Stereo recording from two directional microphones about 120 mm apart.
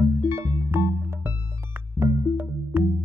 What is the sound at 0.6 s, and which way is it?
Music, 20° right (ahead or behind).